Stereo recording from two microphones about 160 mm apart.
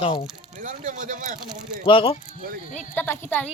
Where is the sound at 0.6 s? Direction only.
55° right (ahead or behind).